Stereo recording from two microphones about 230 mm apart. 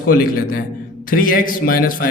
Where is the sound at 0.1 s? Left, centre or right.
Left.